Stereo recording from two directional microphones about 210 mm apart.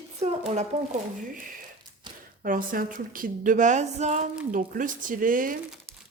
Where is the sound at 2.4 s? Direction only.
40° right (ahead or behind).